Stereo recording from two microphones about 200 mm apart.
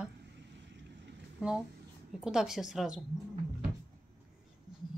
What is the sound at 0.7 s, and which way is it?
Vehicle, 60° right (ahead or behind).